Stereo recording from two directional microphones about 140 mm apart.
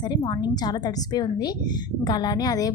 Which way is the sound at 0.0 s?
30° left (ahead or behind).